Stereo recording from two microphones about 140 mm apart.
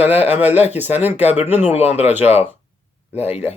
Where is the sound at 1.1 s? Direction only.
50° left (ahead or behind).